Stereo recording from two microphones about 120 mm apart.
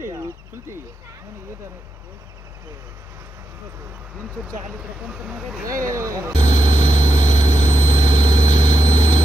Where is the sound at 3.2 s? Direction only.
20° right (ahead or behind).